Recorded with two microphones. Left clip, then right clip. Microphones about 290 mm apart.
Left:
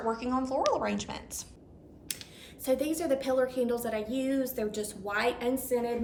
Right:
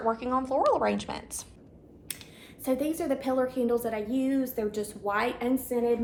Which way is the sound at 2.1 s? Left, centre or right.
Centre.